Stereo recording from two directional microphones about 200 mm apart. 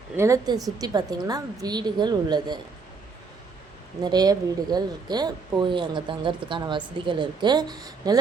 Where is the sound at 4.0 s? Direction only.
20° right (ahead or behind).